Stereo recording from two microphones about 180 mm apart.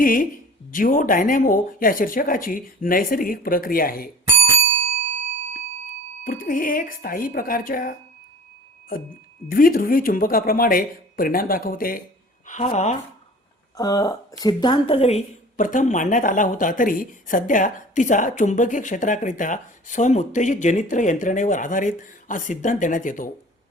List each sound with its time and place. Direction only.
0.0 s a sound: 50° left (ahead or behind)
0.7 s a woman's voice: 50° left (ahead or behind)
6.2 s a woman's voice: 50° left (ahead or behind)
12.5 s a woman's voice: 40° left (ahead or behind)
13.7 s a woman's voice: 20° left (ahead or behind); by 23.3 s 50° left (ahead or behind)